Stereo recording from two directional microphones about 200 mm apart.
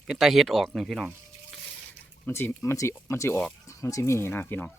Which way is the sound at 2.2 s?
10° left (ahead or behind).